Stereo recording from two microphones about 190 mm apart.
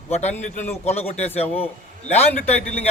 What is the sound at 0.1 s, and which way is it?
Speech, 35° left (ahead or behind).